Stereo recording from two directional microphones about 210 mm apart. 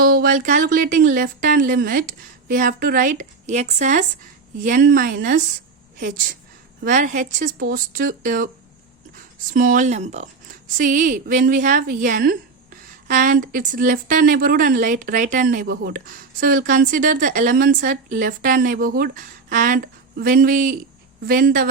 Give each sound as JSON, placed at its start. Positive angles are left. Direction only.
{"t": 0.0, "sound": "a woman's voice", "side_deg": -45}